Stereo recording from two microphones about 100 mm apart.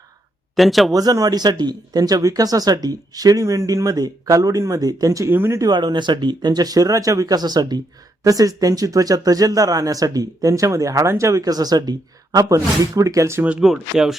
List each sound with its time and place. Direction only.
0.5 s speech: centre (ahead or behind)
0.9 s speech: 40° right (ahead or behind)
5.3 s speech: 20° right (ahead or behind)
5.5 s speech: 45° right (ahead or behind)
13.4 s speech: 10° right (ahead or behind)